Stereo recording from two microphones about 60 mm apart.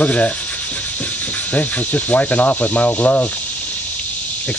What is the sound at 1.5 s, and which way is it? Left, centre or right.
Speech, left.